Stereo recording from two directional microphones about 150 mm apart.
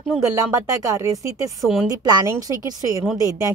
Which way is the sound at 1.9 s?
25° right (ahead or behind).